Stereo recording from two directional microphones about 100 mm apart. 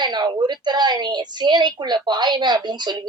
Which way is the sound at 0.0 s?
45° right (ahead or behind).